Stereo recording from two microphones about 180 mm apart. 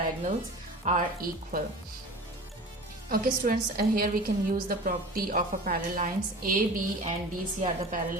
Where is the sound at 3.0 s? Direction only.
50° right (ahead or behind).